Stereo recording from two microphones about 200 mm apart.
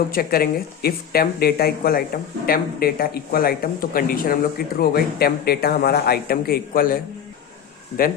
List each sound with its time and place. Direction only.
0.1 s speech: 50° left (ahead or behind)